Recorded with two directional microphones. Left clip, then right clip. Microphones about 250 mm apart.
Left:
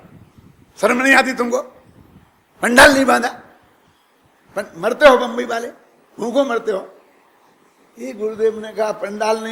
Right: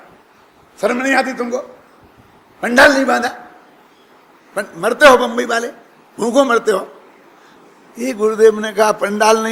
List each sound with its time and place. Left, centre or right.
0.8 s a man's voice: left
4.5 s a man's voice: centre
7.9 s a man's voice: centre